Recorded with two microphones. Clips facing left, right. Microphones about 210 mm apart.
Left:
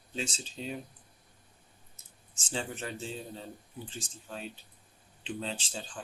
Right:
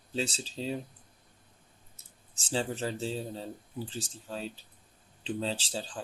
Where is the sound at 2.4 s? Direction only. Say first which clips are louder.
Right 5 dB; 35° right (ahead or behind).